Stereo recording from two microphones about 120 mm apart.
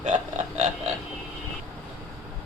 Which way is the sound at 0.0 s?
80° right.